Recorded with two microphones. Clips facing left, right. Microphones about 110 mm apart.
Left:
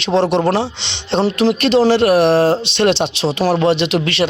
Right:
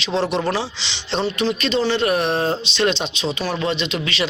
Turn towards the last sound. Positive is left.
turn(degrees=65)  # may be behind; listen again after turning